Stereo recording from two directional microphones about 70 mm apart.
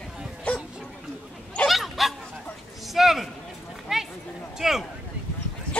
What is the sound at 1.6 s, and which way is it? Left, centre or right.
Bow-wow, centre.